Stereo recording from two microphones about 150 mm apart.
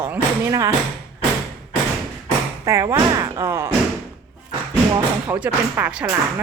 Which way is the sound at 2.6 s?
20° right (ahead or behind).